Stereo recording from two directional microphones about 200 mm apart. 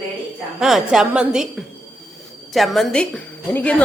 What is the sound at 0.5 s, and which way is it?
A woman's voice, centre (ahead or behind).